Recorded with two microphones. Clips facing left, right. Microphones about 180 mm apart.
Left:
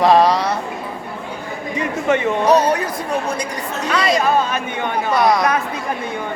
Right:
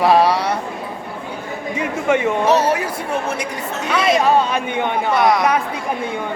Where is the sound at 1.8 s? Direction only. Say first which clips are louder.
Even; 10° right (ahead or behind).